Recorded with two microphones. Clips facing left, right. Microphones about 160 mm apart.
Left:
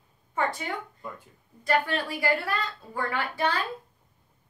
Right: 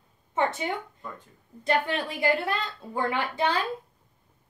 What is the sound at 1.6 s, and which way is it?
A woman's voice, 20° right (ahead or behind).